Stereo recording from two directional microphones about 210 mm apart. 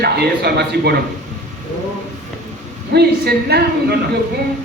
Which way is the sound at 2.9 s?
50° right (ahead or behind).